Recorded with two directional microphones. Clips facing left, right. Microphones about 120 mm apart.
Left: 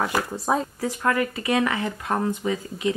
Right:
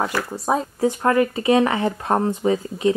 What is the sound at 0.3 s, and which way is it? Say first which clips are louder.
Speech: right 2 dB; 5° right (ahead or behind).